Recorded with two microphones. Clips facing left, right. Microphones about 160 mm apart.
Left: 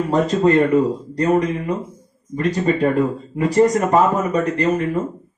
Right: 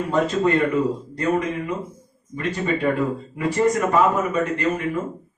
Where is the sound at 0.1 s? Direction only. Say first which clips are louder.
Left 4 dB; 35° left (ahead or behind).